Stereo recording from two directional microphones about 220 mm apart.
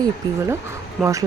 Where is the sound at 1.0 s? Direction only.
15° right (ahead or behind).